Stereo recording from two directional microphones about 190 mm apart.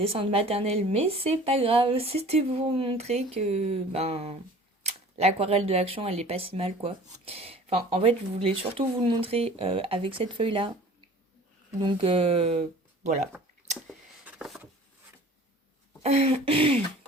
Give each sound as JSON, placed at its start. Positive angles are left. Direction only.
{"t": 0.0, "sound": "speech", "side_deg": -30}
{"t": 11.8, "sound": "speech", "side_deg": -25}
{"t": 14.3, "sound": "a sound", "side_deg": 0}
{"t": 16.0, "sound": "speech", "side_deg": -35}